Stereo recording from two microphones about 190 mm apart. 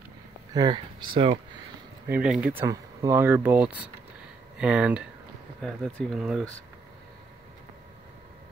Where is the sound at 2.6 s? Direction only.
20° right (ahead or behind); by 6.5 s centre (ahead or behind).